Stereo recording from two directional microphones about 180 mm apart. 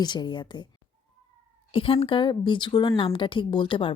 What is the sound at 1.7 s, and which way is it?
Speech, 30° left (ahead or behind).